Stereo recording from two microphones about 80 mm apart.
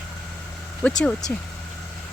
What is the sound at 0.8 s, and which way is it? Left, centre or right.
Speech, centre.